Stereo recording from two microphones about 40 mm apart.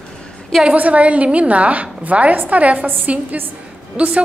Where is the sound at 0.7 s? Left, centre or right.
Right.